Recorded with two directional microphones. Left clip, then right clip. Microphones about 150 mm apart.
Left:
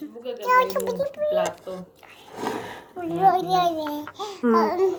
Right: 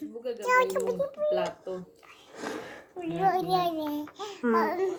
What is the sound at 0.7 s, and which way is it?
Speech, 15° right (ahead or behind).